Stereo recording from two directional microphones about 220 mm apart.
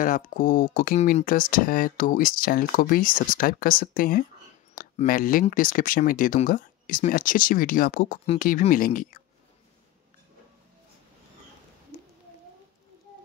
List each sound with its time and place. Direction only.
0.0 s speech: 35° left (ahead or behind)